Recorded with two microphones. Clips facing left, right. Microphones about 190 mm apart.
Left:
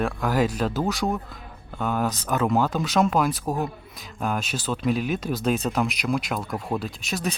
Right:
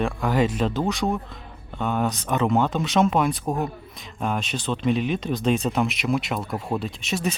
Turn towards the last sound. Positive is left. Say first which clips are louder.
# right 2 dB
turn(degrees=0)  # may be behind; listen again after turning